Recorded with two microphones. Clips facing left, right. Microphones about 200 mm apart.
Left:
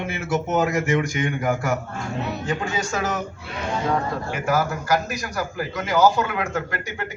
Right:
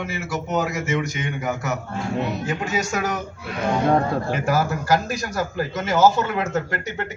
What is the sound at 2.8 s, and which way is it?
Speech, 15° right (ahead or behind).